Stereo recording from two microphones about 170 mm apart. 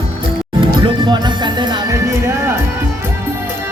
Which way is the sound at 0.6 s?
30° right (ahead or behind).